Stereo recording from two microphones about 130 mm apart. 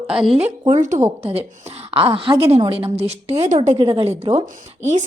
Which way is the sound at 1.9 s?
45° right (ahead or behind).